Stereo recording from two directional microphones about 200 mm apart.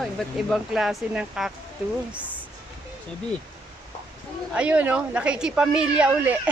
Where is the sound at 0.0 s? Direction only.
Centre (ahead or behind).